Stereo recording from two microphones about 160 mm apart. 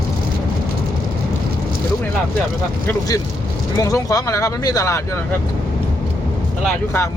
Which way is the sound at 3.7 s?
20° left (ahead or behind).